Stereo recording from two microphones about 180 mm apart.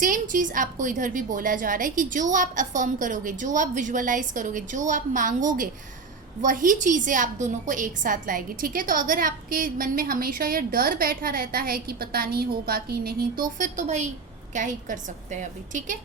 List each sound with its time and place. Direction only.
0.0 s a woman's voice: 45° right (ahead or behind)
13.6 s a woman's voice: 40° right (ahead or behind)